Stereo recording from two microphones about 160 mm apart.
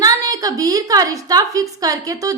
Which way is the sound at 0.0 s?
20° right (ahead or behind).